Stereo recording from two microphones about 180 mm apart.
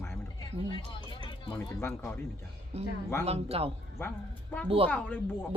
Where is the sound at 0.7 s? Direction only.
25° left (ahead or behind).